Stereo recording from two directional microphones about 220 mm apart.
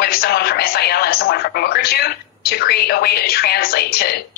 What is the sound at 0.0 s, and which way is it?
A woman's voice, 45° left (ahead or behind).